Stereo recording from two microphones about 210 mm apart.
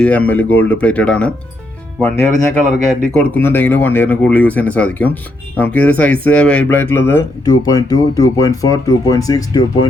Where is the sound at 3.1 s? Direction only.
10° left (ahead or behind).